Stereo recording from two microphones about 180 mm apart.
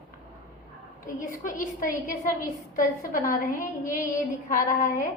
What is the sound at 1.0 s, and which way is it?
A woman's voice, 45° left (ahead or behind).